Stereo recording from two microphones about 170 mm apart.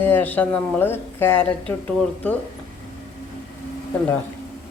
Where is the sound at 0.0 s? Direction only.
10° left (ahead or behind).